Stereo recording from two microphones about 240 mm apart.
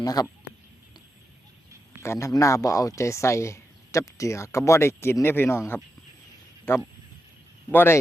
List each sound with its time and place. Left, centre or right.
0.0 s speech: centre
2.0 s speech: centre